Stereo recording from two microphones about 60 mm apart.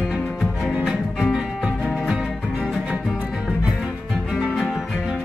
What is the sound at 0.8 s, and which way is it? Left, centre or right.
Music, centre.